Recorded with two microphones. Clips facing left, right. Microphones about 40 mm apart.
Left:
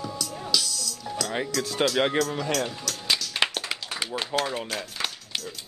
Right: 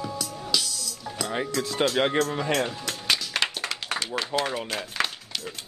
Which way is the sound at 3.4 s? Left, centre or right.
Right.